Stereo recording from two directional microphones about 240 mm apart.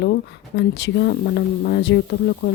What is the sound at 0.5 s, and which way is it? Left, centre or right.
Speech, left.